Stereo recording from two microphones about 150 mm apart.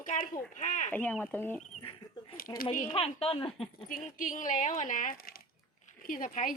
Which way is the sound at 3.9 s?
65° left (ahead or behind).